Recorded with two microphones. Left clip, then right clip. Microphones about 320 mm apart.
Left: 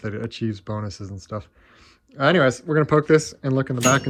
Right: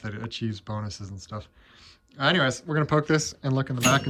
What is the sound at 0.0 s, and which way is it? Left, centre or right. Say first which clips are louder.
Speech: left 5 dB; centre.